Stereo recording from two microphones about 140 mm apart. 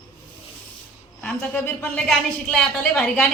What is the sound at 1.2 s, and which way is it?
A woman's voice, 10° left (ahead or behind).